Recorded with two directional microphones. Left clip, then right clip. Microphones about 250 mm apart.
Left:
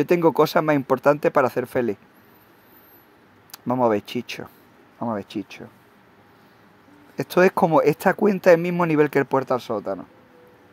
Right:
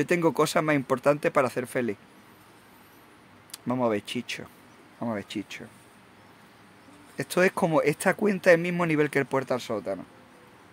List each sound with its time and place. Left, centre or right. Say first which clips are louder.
0.0 s speech: left 6 dB; centre
3.5 s speech: left 6 dB; centre
7.2 s speech: left 6 dB; centre